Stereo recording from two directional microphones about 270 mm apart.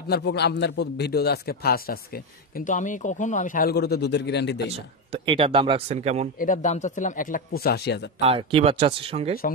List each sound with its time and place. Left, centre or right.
0.1 s speech: left
4.6 s speech: centre
6.4 s speech: left
8.2 s speech: right